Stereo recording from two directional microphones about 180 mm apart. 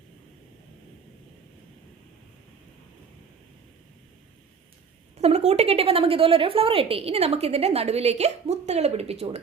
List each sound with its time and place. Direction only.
5.1 s a woman's voice: 35° right (ahead or behind)